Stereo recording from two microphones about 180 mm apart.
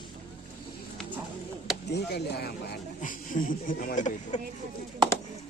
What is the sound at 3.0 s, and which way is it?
Speech, 45° left (ahead or behind).